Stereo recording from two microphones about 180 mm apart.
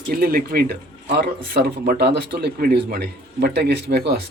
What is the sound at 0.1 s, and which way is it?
Speech, 55° right (ahead or behind).